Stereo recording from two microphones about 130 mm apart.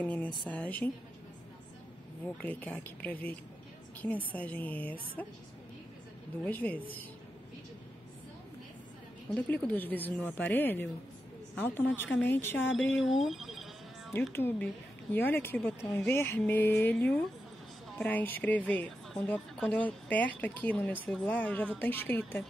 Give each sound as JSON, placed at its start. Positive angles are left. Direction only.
{"t": 0.0, "sound": "a woman's voice", "side_deg": 10}
{"t": 2.2, "sound": "a woman's voice", "side_deg": 10}
{"t": 6.4, "sound": "a woman's voice", "side_deg": 10}
{"t": 9.3, "sound": "a woman's voice", "side_deg": 15}
{"t": 13.0, "sound": "telephone bell ringing", "side_deg": 0}
{"t": 14.3, "sound": "a woman's voice", "side_deg": 15}